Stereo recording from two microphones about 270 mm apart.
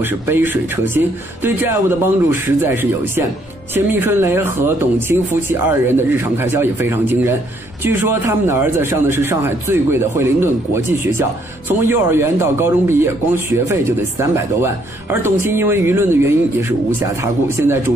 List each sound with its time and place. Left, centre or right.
0.0 s speech: centre